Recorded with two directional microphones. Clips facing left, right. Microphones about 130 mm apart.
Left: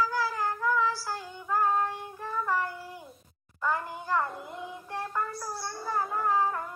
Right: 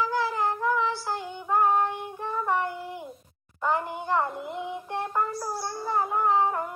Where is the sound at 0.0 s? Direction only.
25° right (ahead or behind).